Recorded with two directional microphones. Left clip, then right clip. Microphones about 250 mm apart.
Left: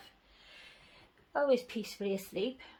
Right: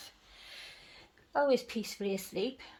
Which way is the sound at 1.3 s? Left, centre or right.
Centre.